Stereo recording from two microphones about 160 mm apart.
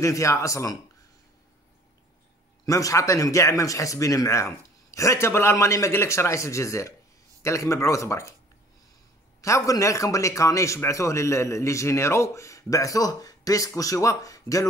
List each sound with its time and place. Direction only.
0.0 s a man's voice: 20° left (ahead or behind)
2.6 s a man's voice: 20° left (ahead or behind)
9.4 s a man's voice: 20° left (ahead or behind)